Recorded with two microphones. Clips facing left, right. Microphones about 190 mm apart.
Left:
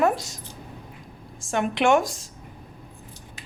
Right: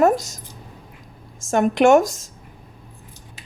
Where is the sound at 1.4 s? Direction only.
45° right (ahead or behind).